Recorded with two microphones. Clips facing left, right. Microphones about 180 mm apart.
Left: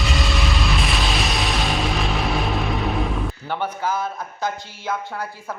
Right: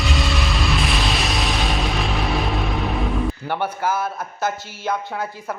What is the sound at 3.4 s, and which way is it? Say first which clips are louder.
Speech: right 2 dB; 10° right (ahead or behind).